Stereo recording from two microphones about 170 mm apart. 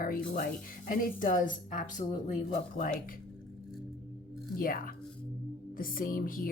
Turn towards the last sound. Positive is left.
turn(degrees=55)  # may be behind; listen again after turning